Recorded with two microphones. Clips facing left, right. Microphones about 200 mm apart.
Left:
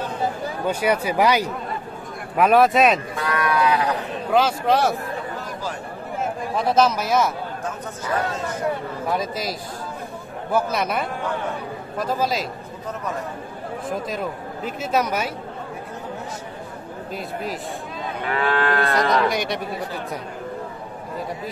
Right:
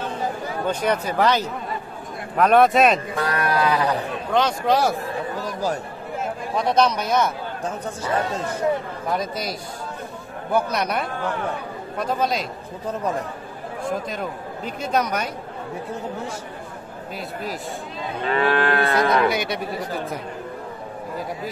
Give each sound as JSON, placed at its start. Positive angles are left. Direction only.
{"t": 0.7, "sound": "speech", "side_deg": 10}
{"t": 3.3, "sound": "sheep", "side_deg": -35}
{"t": 4.3, "sound": "speech", "side_deg": 5}
{"t": 6.5, "sound": "speech", "side_deg": 5}
{"t": 7.6, "sound": "speech", "side_deg": -30}
{"t": 9.1, "sound": "speech", "side_deg": 0}
{"t": 13.8, "sound": "speech", "side_deg": 0}
{"t": 18.2, "sound": "moo", "side_deg": -25}
{"t": 19.2, "sound": "speech", "side_deg": 0}